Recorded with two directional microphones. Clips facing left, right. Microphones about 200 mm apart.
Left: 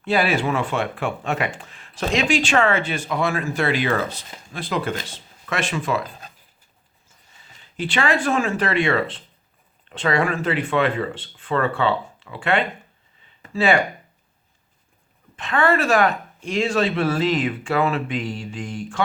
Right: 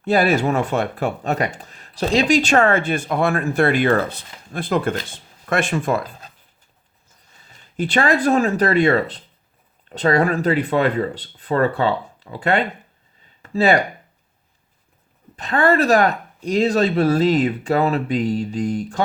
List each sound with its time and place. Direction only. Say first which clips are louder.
0.0 s speech: right 4 dB; 45° right (ahead or behind)
7.8 s speech: right 4 dB; 40° right (ahead or behind)
15.4 s speech: right 3 dB; 40° right (ahead or behind)